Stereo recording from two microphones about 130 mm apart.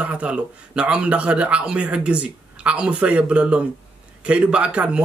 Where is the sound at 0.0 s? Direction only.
10° right (ahead or behind).